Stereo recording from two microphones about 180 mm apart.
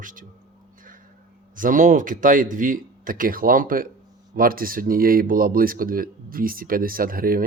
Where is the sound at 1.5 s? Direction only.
50° right (ahead or behind).